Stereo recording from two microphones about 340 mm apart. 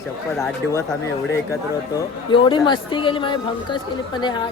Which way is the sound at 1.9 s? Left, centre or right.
Centre.